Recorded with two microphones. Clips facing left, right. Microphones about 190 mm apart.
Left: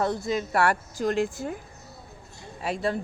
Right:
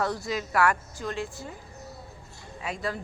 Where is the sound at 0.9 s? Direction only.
45° left (ahead or behind).